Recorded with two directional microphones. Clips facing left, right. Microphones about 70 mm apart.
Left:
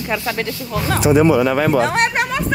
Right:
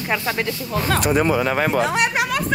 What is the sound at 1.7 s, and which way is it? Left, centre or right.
Speech, left.